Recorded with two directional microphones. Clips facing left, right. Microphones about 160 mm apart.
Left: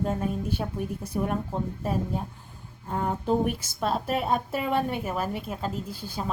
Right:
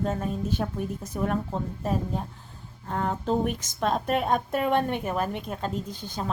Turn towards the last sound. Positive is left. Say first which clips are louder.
# right 1 dB
turn(degrees=10)  # may be behind; listen again after turning